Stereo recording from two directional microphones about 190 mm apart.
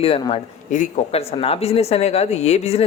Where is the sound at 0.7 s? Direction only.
40° left (ahead or behind).